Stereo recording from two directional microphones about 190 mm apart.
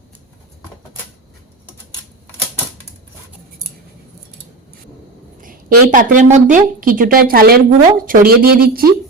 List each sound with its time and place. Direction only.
5.4 s a woman's voice: 45° right (ahead or behind)